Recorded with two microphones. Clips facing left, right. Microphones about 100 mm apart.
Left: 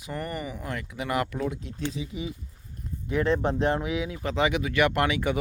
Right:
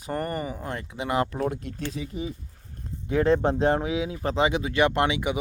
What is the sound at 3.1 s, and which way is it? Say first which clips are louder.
Speech: right 3 dB; 35° right (ahead or behind).